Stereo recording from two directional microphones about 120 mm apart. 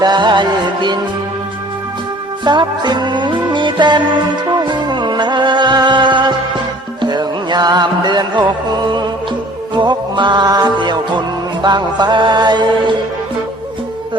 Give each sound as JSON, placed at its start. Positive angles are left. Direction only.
{"t": 0.0, "sound": "music", "side_deg": -40}
{"t": 2.4, "sound": "music", "side_deg": -40}